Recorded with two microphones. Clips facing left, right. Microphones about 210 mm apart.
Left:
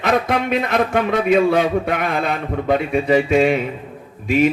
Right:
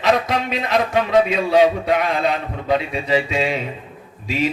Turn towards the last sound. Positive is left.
turn(degrees=55)  # may be behind; listen again after turning